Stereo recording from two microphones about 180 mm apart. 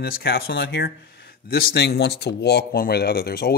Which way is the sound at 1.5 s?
55° left (ahead or behind).